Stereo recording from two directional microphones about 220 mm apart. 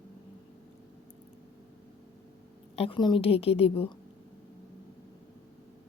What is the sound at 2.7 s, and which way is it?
A woman's voice, 25° left (ahead or behind).